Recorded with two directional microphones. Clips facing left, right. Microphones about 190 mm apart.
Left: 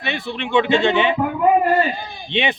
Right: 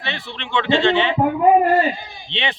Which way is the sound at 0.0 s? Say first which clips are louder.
Left 5 dB; 15° left (ahead or behind).